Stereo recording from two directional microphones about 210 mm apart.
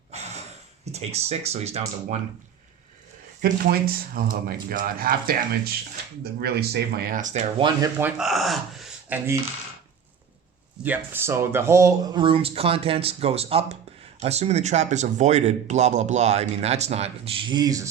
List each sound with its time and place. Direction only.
0.1 s a sound: 30° right (ahead or behind)
0.9 s speech: 30° right (ahead or behind)
3.4 s speech: 45° right (ahead or behind)
7.6 s speech: 15° right (ahead or behind)
10.8 s speech: 10° right (ahead or behind)